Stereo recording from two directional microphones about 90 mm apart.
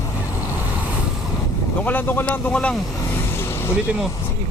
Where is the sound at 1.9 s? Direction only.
20° left (ahead or behind).